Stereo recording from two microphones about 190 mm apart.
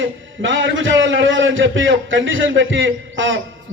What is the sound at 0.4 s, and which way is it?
A man's voice, 90° right.